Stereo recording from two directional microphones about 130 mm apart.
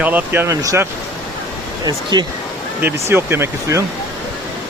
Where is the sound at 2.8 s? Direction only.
20° right (ahead or behind).